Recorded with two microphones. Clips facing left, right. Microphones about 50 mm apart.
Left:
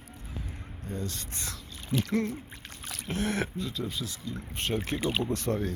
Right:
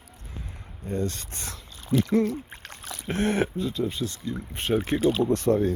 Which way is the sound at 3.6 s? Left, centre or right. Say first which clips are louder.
Right 6 dB; right.